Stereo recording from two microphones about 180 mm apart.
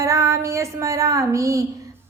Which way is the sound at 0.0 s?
15° right (ahead or behind).